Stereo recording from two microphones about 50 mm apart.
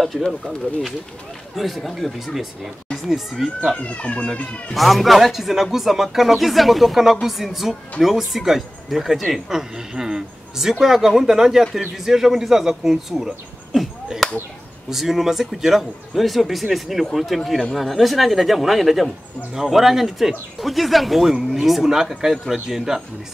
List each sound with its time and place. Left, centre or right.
0.0 s speech: centre
1.5 s speech: centre
3.7 s speech: left
4.7 s speech: centre
14.9 s speech: centre